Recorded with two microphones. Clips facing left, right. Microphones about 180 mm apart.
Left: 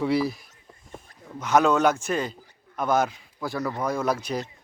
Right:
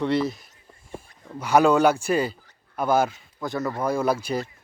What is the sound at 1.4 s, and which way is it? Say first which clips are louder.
Speech: right 2 dB; 10° right (ahead or behind).